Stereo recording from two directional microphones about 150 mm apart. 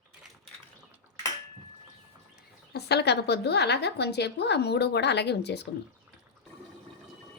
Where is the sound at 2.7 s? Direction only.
90° left.